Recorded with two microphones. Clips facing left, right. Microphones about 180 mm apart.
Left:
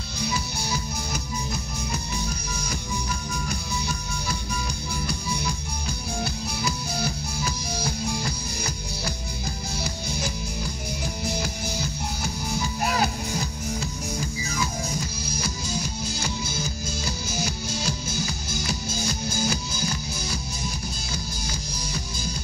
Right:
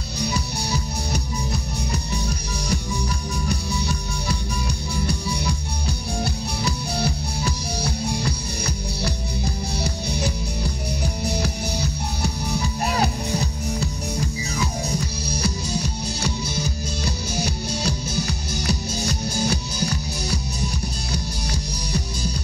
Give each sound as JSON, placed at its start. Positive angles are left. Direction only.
{"t": 0.7, "sound": "music", "side_deg": -35}
{"t": 5.0, "sound": "music", "side_deg": -35}
{"t": 15.2, "sound": "music", "side_deg": -35}
{"t": 17.8, "sound": "music", "side_deg": -65}
{"t": 19.0, "sound": "music", "side_deg": -35}